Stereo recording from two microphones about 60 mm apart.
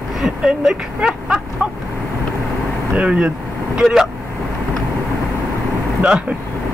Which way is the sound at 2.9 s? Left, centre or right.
Right.